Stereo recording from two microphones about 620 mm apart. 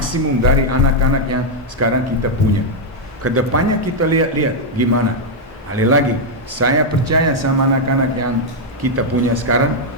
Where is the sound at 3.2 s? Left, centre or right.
Right.